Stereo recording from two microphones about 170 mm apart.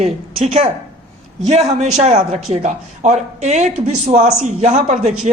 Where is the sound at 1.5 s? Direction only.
40° right (ahead or behind).